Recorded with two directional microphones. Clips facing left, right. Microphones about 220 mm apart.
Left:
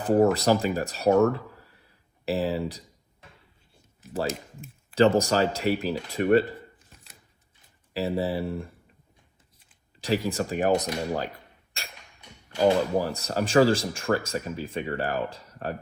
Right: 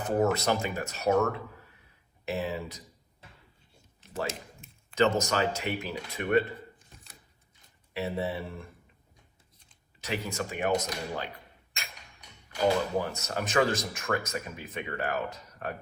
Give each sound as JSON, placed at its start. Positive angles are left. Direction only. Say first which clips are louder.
{"t": 0.0, "sound": "speech", "louder": "left 6 dB", "side_deg": 35}
{"t": 4.9, "sound": "speech", "louder": "left 5 dB", "side_deg": 30}
{"t": 7.9, "sound": "speech", "louder": "left 5 dB", "side_deg": 35}
{"t": 10.0, "sound": "speech", "louder": "left 7 dB", "side_deg": 35}